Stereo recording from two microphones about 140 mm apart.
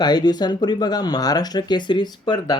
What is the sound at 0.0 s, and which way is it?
Speech, 30° left (ahead or behind).